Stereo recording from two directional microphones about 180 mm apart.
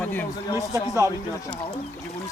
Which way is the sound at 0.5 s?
20° right (ahead or behind).